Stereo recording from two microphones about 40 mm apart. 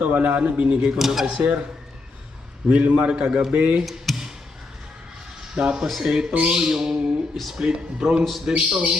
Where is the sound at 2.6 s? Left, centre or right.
Right.